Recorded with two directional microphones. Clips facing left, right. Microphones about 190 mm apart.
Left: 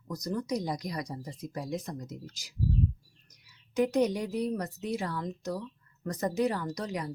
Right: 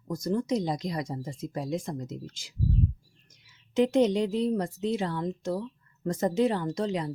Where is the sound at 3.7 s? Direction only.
25° right (ahead or behind).